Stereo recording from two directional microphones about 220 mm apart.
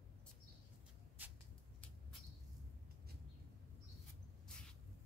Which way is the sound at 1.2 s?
5° right (ahead or behind).